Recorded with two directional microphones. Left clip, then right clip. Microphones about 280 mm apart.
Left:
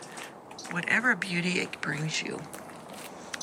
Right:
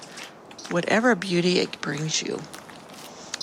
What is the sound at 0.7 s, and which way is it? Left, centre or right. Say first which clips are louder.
Speech: right 5 dB; centre.